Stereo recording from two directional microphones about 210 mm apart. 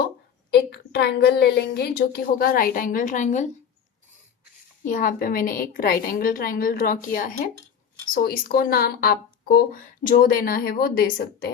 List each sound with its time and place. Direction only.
0.5 s speech: 50° left (ahead or behind); by 3.5 s 35° left (ahead or behind)
4.9 s speech: 40° left (ahead or behind)